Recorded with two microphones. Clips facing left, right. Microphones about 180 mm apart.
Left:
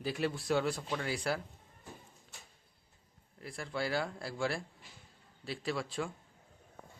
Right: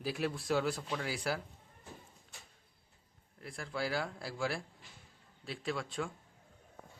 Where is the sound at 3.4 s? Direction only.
Centre (ahead or behind).